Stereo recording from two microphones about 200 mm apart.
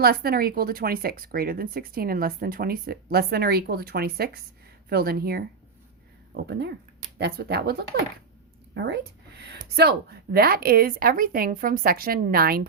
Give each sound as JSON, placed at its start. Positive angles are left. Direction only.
{"t": 0.0, "sound": "speech", "side_deg": -50}